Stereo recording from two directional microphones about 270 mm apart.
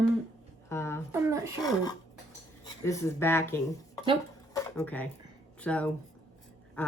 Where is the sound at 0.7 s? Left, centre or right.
Centre.